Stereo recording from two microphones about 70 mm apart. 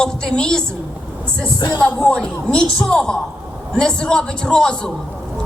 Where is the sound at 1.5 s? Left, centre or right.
Left.